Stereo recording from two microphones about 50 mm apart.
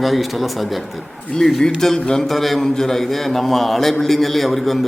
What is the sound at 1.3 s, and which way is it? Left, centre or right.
A man's voice, centre.